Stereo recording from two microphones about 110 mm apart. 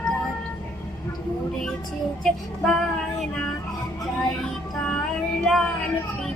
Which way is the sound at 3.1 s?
5° left (ahead or behind).